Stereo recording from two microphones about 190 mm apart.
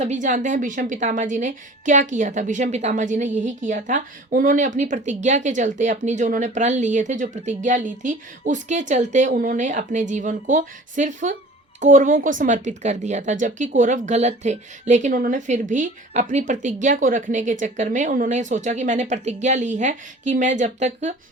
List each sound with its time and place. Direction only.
0.0 s a woman's voice: 40° right (ahead or behind)